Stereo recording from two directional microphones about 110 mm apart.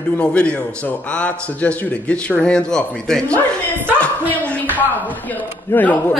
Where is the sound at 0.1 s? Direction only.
10° left (ahead or behind).